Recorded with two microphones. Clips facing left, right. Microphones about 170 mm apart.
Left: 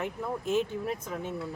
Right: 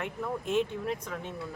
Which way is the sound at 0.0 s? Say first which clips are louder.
Left 1 dB; centre (ahead or behind).